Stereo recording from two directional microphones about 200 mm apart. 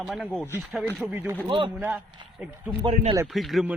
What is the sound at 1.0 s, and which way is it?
Speech, 10° right (ahead or behind).